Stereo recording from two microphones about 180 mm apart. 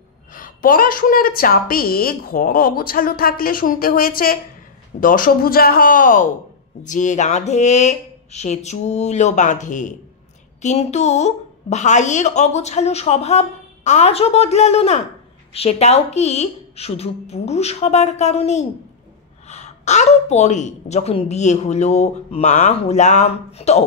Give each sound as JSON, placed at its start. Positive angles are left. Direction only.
{"t": 0.3, "sound": "a woman's voice", "side_deg": 50}